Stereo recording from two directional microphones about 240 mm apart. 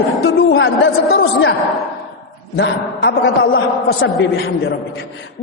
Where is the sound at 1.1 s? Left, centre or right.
Left.